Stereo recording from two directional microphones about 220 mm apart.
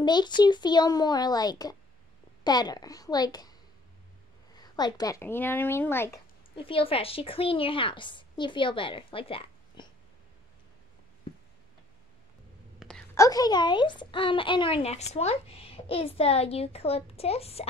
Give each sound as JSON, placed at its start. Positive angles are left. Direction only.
{"t": 0.0, "sound": "a woman's voice", "side_deg": 20}
{"t": 4.6, "sound": "speech", "side_deg": 20}
{"t": 6.5, "sound": "a woman's voice", "side_deg": 25}
{"t": 12.7, "sound": "a sound", "side_deg": 5}
{"t": 13.1, "sound": "a woman's voice", "side_deg": 15}